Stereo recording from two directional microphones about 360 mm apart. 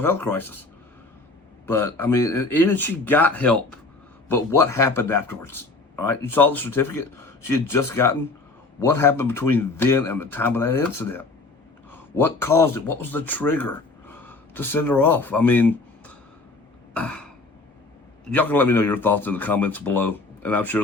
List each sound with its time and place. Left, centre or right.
0.0 s speech: centre
1.6 s speech: centre
6.7 s speech: left
7.4 s speech: centre
11.9 s a sound: centre
12.5 s speech: centre
16.9 s throat clearing: centre
18.3 s speech: centre